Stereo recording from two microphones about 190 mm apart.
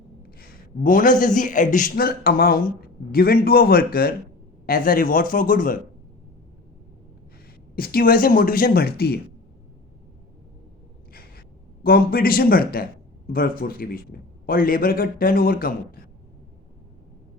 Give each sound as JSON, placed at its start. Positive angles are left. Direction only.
{"t": 0.2, "sound": "a man's voice", "side_deg": 50}
{"t": 7.8, "sound": "a man's voice", "side_deg": 50}
{"t": 11.1, "sound": "gasp", "side_deg": 50}
{"t": 13.2, "sound": "a man's voice", "side_deg": 50}